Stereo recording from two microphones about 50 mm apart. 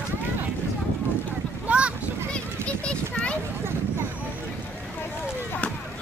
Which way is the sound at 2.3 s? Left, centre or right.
Left.